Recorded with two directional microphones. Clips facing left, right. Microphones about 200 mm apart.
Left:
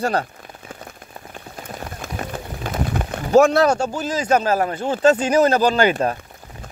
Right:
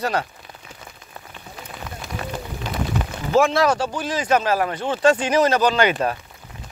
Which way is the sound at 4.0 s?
40° left (ahead or behind).